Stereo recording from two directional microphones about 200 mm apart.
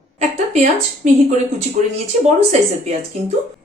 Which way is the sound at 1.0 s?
40° right (ahead or behind).